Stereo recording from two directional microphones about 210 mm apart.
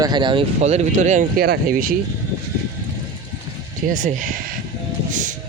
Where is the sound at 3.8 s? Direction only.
35° right (ahead or behind).